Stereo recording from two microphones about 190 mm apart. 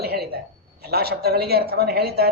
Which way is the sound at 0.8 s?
55° right (ahead or behind).